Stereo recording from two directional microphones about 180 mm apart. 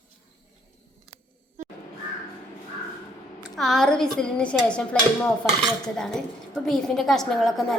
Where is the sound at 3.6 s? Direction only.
Centre (ahead or behind).